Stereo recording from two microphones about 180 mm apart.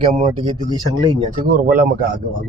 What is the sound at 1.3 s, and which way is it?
Speech, 45° right (ahead or behind).